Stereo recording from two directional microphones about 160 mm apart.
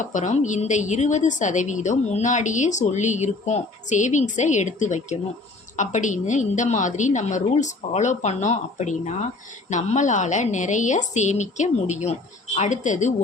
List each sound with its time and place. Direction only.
0.0 s a woman's voice: 50° left (ahead or behind)